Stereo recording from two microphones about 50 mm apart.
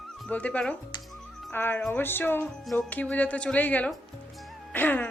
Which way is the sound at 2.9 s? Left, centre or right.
Left.